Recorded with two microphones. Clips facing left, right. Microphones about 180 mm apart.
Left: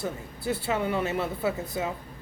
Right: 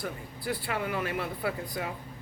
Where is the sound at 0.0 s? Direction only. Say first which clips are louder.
Left 4 dB; 25° left (ahead or behind).